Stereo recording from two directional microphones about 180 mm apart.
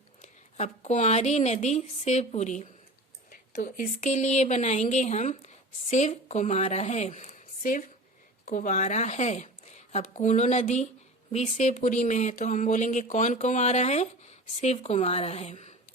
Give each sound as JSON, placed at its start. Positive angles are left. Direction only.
{"t": 0.2, "sound": "speech", "side_deg": 40}
{"t": 3.2, "sound": "a woman's voice", "side_deg": 50}